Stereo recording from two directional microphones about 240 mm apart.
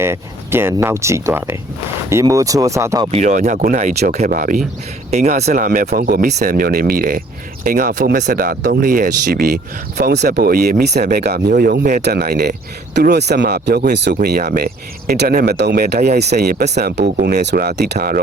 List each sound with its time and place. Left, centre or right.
0.0 s speech: centre
3.1 s speech: right
17.0 s speech: right
17.3 s speech: right